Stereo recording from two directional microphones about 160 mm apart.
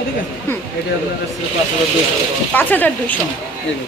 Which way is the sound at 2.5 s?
10° left (ahead or behind).